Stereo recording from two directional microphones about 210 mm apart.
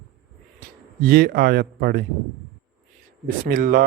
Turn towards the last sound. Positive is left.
turn(degrees=-40)  # may be behind; listen again after turning